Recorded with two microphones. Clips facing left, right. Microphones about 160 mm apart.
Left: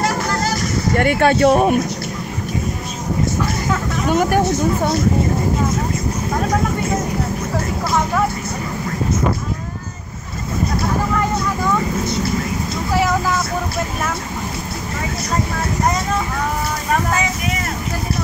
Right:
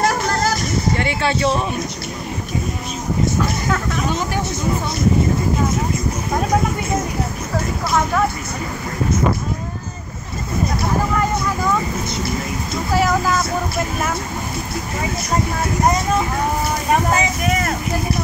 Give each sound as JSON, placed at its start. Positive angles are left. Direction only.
{"t": 0.9, "sound": "speech", "side_deg": 50}
{"t": 4.1, "sound": "speech", "side_deg": 50}